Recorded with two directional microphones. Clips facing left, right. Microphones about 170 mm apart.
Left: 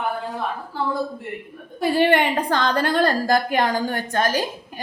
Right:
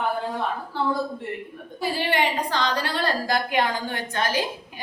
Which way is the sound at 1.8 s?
55° left (ahead or behind).